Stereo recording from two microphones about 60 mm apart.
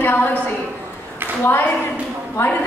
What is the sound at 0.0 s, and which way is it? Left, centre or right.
Speech, left.